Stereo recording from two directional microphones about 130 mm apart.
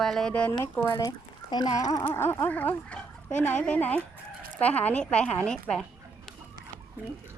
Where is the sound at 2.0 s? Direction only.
15° left (ahead or behind).